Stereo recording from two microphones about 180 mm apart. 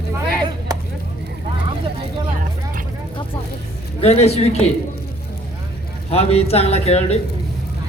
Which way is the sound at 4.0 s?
35° left (ahead or behind).